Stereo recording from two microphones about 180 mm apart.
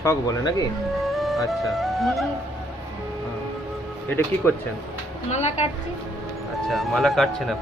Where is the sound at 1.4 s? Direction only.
Centre (ahead or behind).